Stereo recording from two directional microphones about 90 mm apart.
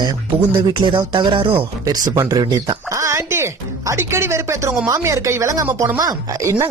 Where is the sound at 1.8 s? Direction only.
40° right (ahead or behind).